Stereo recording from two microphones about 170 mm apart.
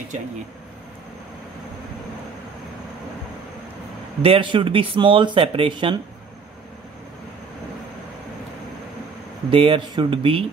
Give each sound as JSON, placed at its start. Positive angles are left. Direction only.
{"t": 4.2, "sound": "speech", "side_deg": -30}
{"t": 9.5, "sound": "speech", "side_deg": -30}